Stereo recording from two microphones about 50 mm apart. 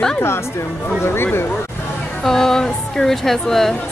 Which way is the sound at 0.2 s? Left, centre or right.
Left.